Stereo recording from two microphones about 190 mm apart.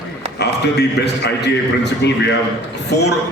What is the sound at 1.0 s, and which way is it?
A man's voice, 60° left (ahead or behind).